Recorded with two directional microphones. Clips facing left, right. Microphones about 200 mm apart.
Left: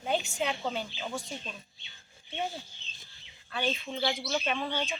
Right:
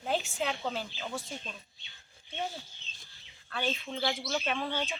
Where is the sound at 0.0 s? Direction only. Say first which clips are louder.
Left 1 dB; centre (ahead or behind).